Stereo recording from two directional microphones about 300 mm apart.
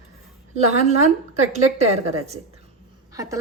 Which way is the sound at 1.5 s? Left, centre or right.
Right.